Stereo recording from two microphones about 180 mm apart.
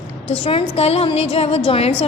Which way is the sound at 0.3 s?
35° left (ahead or behind).